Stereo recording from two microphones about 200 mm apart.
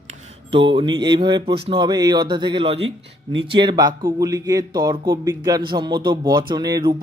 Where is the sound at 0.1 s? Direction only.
25° right (ahead or behind).